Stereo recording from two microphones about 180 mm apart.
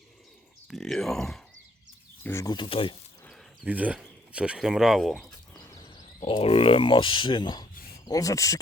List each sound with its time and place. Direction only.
0.7 s speech: centre (ahead or behind)
2.2 s speech: 15° left (ahead or behind)
3.2 s a sound: 5° right (ahead or behind)
4.3 s speech: 5° right (ahead or behind)
5.6 s a sound: 20° left (ahead or behind)
6.2 s speech: 30° left (ahead or behind)